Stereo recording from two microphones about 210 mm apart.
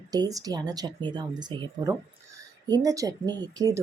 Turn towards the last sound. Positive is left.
turn(degrees=-15)  # may be behind; listen again after turning